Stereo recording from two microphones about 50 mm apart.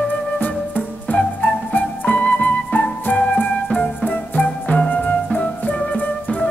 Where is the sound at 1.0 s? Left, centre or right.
Left.